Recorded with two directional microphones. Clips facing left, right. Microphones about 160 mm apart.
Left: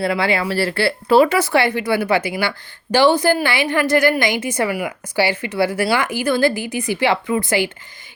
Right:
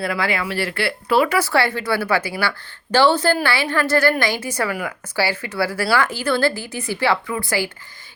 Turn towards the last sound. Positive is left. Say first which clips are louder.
# left 5 dB
turn(degrees=20)  # may be behind; listen again after turning